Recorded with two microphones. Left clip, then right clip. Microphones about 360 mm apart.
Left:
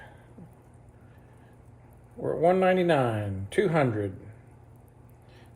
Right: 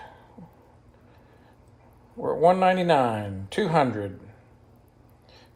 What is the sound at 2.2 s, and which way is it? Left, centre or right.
Speech, centre.